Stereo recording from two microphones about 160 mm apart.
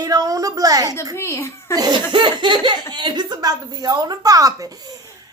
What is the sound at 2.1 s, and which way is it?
Speech, 30° right (ahead or behind).